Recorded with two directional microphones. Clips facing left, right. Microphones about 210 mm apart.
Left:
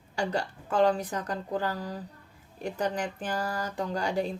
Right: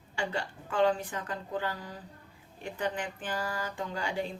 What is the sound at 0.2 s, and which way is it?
Speech, 40° left (ahead or behind).